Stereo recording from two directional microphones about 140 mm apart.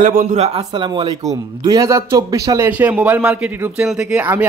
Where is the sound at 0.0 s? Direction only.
70° right (ahead or behind); by 0.7 s 50° right (ahead or behind).